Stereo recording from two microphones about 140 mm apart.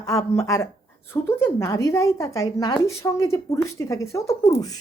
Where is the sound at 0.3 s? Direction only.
20° left (ahead or behind).